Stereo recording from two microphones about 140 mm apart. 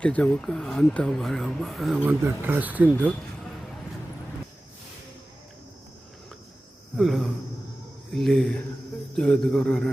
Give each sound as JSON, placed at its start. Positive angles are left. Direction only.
{"t": 0.0, "sound": "speech", "side_deg": 10}
{"t": 2.0, "sound": "speech", "side_deg": -15}
{"t": 6.9, "sound": "speech", "side_deg": 0}